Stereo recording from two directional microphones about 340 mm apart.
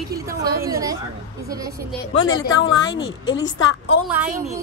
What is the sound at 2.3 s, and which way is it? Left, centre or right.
A woman's voice, left.